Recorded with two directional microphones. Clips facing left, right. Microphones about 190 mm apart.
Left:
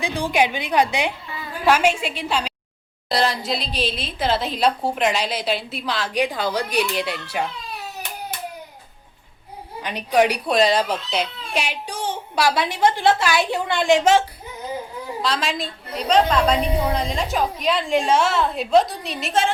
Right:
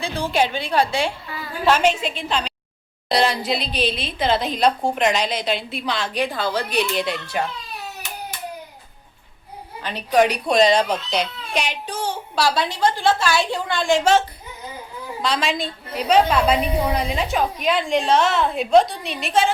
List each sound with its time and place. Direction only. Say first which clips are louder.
0.0 s a woman's voice: left 1 dB; 15° left (ahead or behind)
6.1 s speech: left 2 dB; 15° left (ahead or behind)
9.8 s speech: right 1 dB; 10° left (ahead or behind)
15.2 s a woman's voice: right 2 dB; centre (ahead or behind)